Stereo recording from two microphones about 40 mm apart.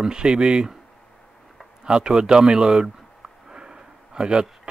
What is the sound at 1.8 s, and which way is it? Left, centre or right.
Speech, right.